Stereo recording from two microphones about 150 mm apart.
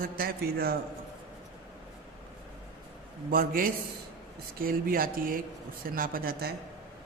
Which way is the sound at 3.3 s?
70° right (ahead or behind).